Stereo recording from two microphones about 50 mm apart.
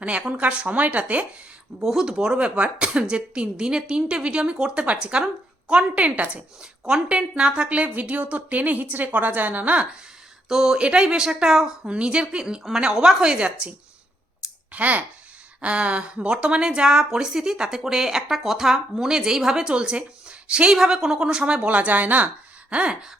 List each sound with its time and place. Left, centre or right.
0.2 s speech: right
1.8 s a woman's voice: centre; by 9.8 s right
10.5 s speech: centre; by 22.3 s right
22.7 s speech: right